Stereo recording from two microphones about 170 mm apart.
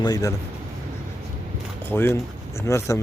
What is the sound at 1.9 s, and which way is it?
Speech, 15° left (ahead or behind).